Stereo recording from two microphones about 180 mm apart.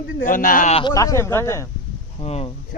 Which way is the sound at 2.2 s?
35° left (ahead or behind).